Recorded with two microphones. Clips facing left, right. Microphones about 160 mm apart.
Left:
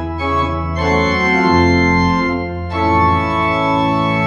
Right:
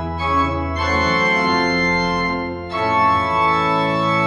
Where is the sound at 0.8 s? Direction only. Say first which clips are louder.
Left 6 dB; 40° left (ahead or behind).